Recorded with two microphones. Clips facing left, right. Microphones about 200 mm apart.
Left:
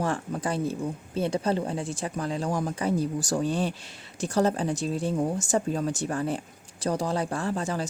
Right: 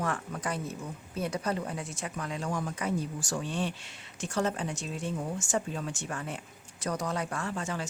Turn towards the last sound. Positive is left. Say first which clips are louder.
# left 6 dB
turn(degrees=35)  # may be behind; listen again after turning